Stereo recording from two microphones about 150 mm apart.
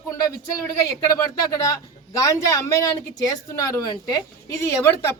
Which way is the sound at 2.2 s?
20° left (ahead or behind).